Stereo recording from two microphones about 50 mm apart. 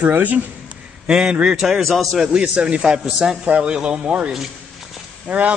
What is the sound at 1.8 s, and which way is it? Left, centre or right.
Speech, centre.